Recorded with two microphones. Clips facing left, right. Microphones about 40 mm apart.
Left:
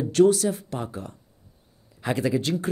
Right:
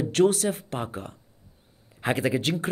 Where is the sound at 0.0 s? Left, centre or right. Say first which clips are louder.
Left 3 dB; right.